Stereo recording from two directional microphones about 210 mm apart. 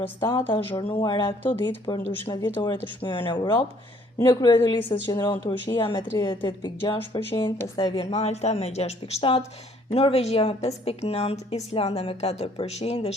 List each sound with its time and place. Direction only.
0.2 s a woman's voice: 20° left (ahead or behind)
8.1 s a woman's voice: 30° left (ahead or behind)